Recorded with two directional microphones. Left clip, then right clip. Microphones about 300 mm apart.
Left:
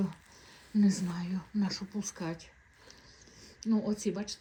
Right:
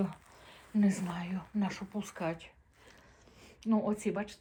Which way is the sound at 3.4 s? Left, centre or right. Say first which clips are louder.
Right 1 dB; centre.